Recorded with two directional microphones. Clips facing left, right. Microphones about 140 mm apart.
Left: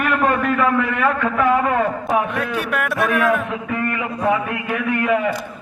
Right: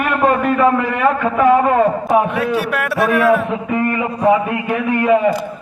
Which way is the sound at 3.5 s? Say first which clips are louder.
Right 5 dB; 30° right (ahead or behind).